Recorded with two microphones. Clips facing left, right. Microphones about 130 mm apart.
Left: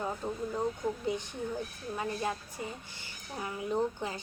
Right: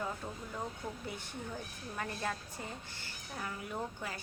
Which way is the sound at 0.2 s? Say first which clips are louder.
Left 8 dB; 30° left (ahead or behind).